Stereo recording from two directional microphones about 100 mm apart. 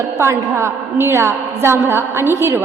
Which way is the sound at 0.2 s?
25° right (ahead or behind).